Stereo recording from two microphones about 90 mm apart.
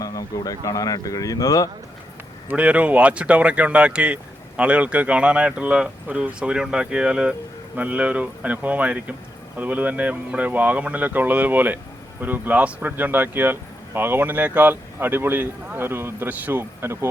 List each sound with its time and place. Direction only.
0.0 s speech: 40° left (ahead or behind)
2.5 s speech: 15° right (ahead or behind)